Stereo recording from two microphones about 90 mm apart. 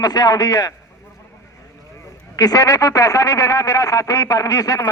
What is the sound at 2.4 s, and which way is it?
Speech, 45° left (ahead or behind).